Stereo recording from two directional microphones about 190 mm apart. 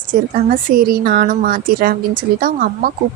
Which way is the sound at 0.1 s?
45° right (ahead or behind).